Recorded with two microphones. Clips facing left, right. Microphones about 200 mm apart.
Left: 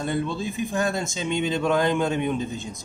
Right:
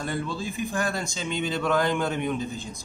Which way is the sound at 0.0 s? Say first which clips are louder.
Left 4 dB; 20° left (ahead or behind).